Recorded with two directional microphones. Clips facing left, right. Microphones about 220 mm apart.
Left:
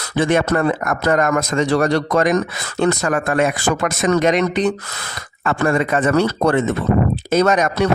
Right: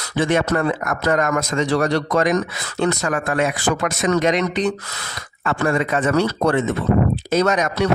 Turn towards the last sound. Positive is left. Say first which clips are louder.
# left 3 dB
turn(degrees=50)  # may be behind; listen again after turning